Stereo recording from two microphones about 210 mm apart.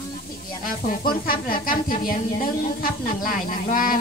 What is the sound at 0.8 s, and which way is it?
Speech, 40° left (ahead or behind).